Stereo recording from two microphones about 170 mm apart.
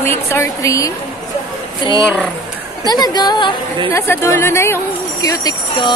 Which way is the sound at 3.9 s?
15° left (ahead or behind).